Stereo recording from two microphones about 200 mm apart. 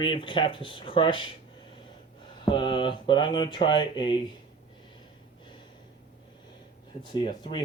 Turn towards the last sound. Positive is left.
turn(degrees=25)  # may be behind; listen again after turning